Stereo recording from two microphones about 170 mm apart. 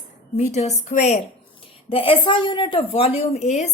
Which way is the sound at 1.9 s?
30° left (ahead or behind).